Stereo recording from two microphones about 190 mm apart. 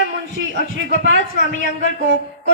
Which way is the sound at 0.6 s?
45° left (ahead or behind).